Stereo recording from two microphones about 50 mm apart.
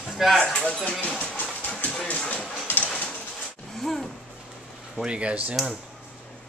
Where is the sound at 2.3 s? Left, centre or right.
Left.